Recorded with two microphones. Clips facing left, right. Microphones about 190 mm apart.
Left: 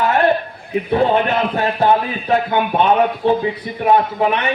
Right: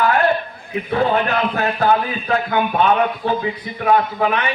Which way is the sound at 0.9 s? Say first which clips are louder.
Left 2 dB; 25° left (ahead or behind).